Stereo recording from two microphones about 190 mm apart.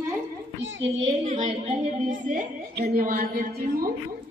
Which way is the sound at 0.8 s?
35° right (ahead or behind).